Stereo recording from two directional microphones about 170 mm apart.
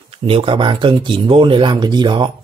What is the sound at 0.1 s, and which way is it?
Speech, 35° right (ahead or behind).